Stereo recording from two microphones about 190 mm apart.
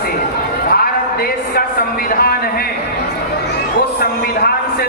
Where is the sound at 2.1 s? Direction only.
50° left (ahead or behind).